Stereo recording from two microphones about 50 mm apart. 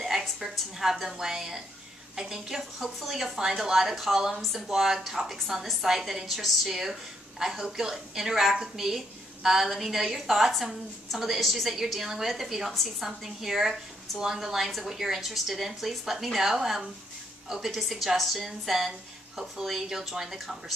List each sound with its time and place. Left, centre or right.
0.4 s a woman's voice: centre